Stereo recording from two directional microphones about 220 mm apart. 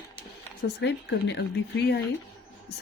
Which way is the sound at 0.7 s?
55° left (ahead or behind).